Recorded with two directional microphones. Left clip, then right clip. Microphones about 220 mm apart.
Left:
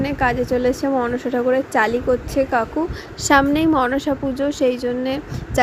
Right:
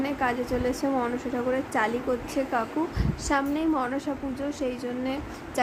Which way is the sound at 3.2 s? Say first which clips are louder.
Left 11 dB; 30° left (ahead or behind).